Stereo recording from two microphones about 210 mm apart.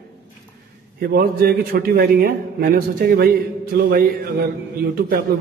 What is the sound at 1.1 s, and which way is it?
A man's voice, 50° right (ahead or behind).